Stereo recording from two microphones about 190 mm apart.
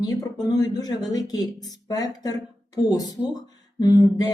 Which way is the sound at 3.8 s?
20° left (ahead or behind).